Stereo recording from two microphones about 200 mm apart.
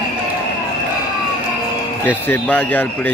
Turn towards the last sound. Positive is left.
turn(degrees=5)  # may be behind; listen again after turning